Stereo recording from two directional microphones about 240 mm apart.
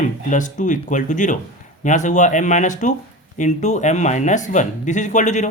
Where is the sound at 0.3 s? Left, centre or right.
Left.